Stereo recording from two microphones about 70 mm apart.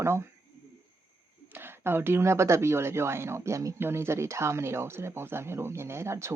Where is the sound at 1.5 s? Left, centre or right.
Right.